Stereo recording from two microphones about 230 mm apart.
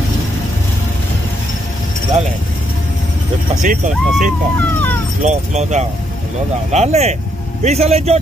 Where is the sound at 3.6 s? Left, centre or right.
Right.